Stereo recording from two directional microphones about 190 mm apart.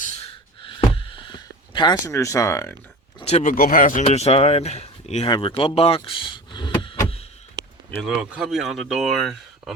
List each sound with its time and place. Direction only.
0.6 s a sound: 25° left (ahead or behind)
3.2 s speech: 35° left (ahead or behind)
4.0 s speech: 35° left (ahead or behind)
5.3 s power windows: 25° left (ahead or behind)
8.0 s speech: 5° right (ahead or behind)